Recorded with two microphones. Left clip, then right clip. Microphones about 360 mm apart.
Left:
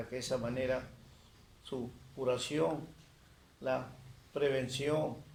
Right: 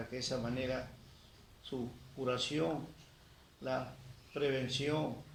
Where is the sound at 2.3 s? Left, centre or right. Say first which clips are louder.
Left 2 dB; left.